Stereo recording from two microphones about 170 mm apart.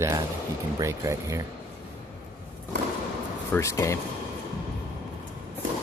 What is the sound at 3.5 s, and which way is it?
Speech, 15° left (ahead or behind).